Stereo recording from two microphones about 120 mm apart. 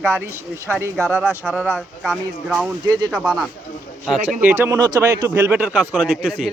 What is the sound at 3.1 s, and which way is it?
Speech, 5° right (ahead or behind).